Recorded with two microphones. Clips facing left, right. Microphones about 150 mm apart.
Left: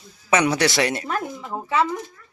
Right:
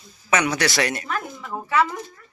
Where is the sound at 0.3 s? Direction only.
30° left (ahead or behind).